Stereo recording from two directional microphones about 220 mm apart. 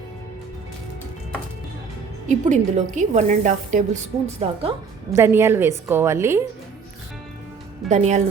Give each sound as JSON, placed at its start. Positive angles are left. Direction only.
{"t": 2.2, "sound": "a woman's voice", "side_deg": -35}
{"t": 5.1, "sound": "a woman's voice", "side_deg": -10}
{"t": 7.9, "sound": "a woman's voice", "side_deg": -30}